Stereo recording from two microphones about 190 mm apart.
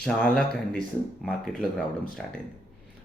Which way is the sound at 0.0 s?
5° left (ahead or behind).